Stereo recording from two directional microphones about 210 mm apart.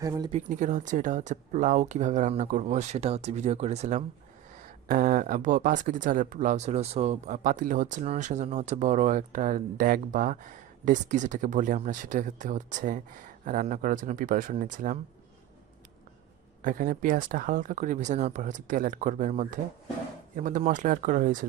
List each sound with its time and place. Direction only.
0.0 s speech: 15° right (ahead or behind)
0.3 s speech: 35° right (ahead or behind)
16.6 s speech: 40° right (ahead or behind)